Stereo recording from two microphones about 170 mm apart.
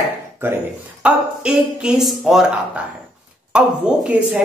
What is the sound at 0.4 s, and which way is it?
Speech, 15° right (ahead or behind).